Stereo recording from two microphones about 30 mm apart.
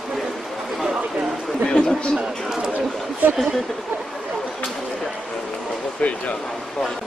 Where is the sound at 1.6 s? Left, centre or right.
Left.